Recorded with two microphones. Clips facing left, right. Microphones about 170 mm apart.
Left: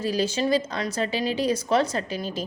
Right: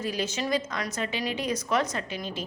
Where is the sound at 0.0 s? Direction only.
35° left (ahead or behind).